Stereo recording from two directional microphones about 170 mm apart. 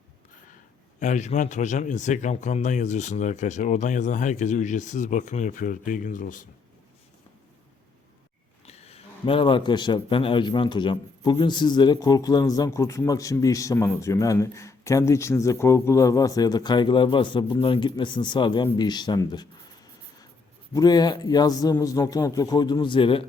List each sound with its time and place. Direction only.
0.9 s speech: 45° left (ahead or behind)
8.6 s a man's voice: 35° left (ahead or behind)
20.7 s a man's voice: 25° left (ahead or behind)